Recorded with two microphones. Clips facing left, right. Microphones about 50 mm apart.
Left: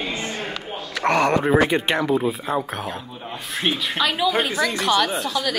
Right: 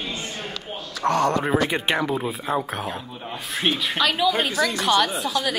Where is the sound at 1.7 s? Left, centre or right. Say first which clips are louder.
Left 3 dB; centre.